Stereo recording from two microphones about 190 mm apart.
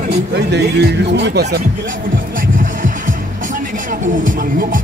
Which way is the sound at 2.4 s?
45° right (ahead or behind).